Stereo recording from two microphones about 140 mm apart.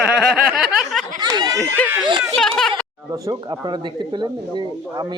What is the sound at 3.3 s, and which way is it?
Speech, 30° right (ahead or behind).